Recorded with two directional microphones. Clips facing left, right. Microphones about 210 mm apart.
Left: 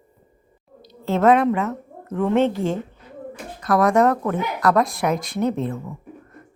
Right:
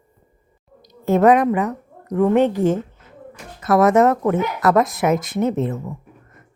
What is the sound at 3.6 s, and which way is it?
Speech, 5° right (ahead or behind).